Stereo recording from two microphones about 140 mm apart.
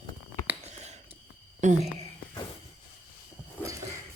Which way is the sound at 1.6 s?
55° right (ahead or behind).